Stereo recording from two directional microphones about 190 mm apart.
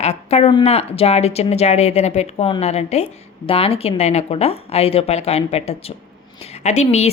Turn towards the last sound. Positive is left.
turn(degrees=35)  # may be behind; listen again after turning